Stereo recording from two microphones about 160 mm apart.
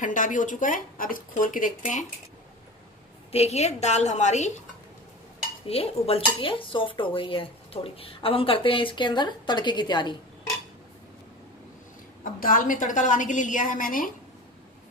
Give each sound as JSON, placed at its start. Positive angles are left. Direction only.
{"t": 0.0, "sound": "speech", "side_deg": 55}
{"t": 3.3, "sound": "a woman's voice", "side_deg": 40}
{"t": 5.7, "sound": "speech", "side_deg": 35}
{"t": 12.4, "sound": "a woman's voice", "side_deg": 60}